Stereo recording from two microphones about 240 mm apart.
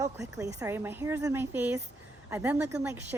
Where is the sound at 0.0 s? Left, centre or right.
Centre.